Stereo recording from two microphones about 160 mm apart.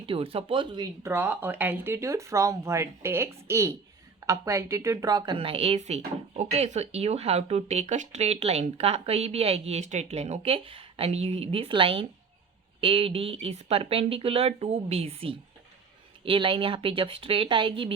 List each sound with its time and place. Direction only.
0.0 s a woman's voice: 35° right (ahead or behind)
1.0 s a woman's voice: 15° right (ahead or behind); by 17.9 s 30° right (ahead or behind)